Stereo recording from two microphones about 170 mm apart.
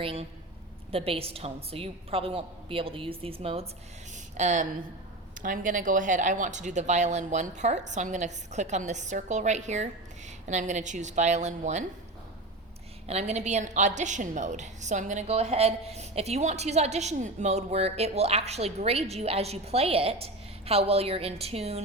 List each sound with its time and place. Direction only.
0.0 s a woman's voice: 35° right (ahead or behind)
4.1 s a sound: 45° right (ahead or behind)
5.4 s speech: 50° right (ahead or behind)
13.1 s a woman's voice: 40° right (ahead or behind)